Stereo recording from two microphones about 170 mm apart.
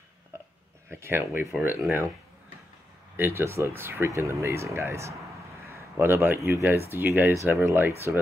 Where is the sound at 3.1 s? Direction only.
15° right (ahead or behind).